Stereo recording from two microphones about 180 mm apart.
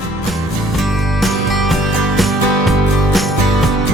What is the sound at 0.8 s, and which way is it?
Music, centre (ahead or behind).